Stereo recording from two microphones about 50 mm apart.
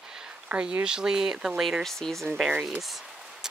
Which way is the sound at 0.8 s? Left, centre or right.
Centre.